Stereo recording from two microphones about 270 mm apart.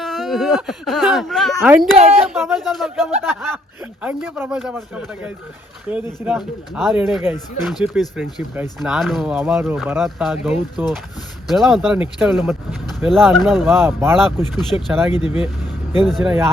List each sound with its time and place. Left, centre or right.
0.0 s speech: centre
2.0 s speech: right
2.4 s speech: centre